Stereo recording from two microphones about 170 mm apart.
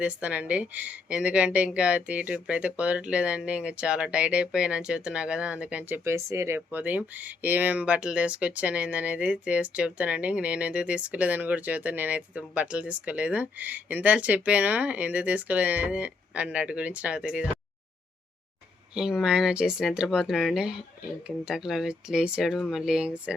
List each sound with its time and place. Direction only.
0.0 s speech: 10° right (ahead or behind)
18.9 s speech: 5° right (ahead or behind)